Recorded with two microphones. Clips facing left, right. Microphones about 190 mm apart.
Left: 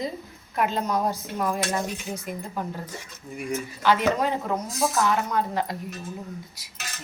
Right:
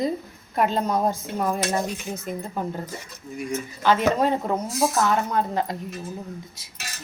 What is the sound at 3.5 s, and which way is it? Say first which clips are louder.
Speech: right 1 dB; 25° right (ahead or behind).